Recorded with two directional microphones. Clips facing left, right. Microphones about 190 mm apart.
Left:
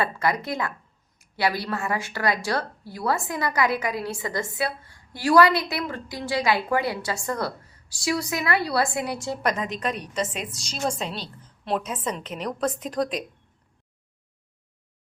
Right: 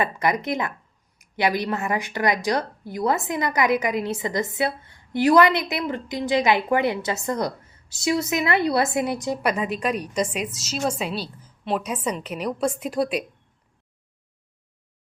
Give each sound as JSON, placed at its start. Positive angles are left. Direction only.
{"t": 0.0, "sound": "a woman's voice", "side_deg": -20}